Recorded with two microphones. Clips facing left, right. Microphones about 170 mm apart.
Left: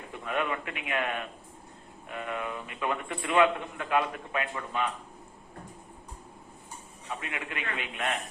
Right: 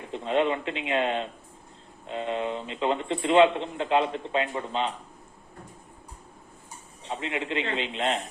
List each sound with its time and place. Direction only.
0.1 s a man's voice: 25° right (ahead or behind)
7.0 s a man's voice: 25° right (ahead or behind)